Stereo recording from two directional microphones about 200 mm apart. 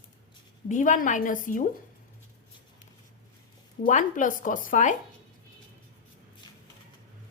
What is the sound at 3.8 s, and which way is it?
Speech, 40° left (ahead or behind).